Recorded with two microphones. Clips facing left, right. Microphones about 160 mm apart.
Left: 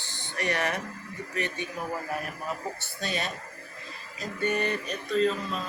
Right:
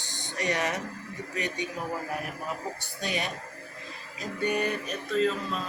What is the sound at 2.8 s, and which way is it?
Speech, 15° right (ahead or behind).